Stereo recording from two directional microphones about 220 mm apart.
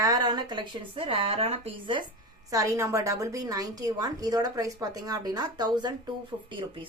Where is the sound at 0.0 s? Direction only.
15° right (ahead or behind).